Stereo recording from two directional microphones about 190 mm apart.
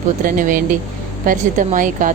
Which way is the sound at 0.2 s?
45° right (ahead or behind).